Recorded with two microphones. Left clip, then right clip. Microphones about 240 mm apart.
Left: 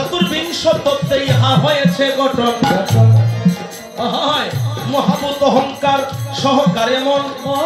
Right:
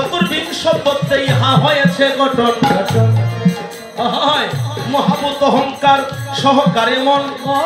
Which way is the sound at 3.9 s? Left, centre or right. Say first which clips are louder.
Right 2 dB; right.